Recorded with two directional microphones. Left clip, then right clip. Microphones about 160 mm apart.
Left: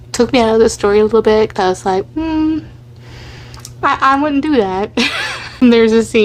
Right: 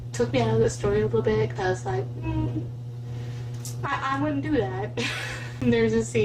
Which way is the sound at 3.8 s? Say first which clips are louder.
Left 16 dB; 40° left (ahead or behind).